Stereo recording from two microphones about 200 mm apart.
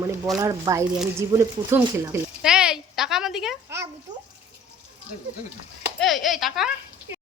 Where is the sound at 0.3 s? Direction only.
15° right (ahead or behind).